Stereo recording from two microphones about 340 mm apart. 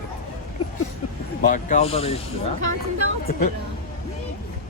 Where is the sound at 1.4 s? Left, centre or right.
Left.